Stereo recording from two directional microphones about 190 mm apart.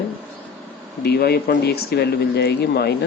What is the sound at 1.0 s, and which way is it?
Speech, 55° left (ahead or behind).